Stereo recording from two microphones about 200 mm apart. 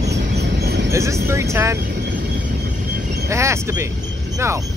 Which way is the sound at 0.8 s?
15° right (ahead or behind).